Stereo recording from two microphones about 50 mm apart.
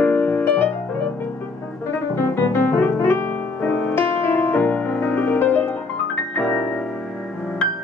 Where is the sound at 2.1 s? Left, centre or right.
Left.